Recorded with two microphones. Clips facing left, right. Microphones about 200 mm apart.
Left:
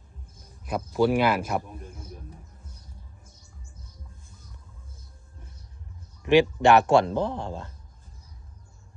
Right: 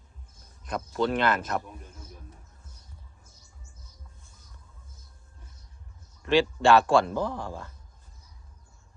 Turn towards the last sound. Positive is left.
turn(degrees=20)  # may be behind; listen again after turning